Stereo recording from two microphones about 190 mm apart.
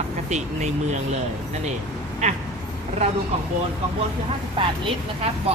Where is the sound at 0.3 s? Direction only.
35° right (ahead or behind).